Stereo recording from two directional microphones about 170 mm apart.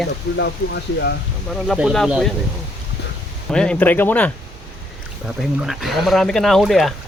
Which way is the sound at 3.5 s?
5° left (ahead or behind).